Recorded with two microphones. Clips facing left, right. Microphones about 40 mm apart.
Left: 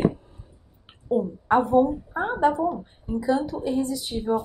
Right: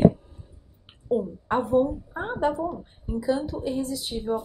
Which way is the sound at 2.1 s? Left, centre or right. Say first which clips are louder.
Left 4 dB; centre.